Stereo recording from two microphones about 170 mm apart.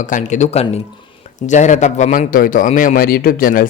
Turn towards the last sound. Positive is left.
turn(degrees=55)  # may be behind; listen again after turning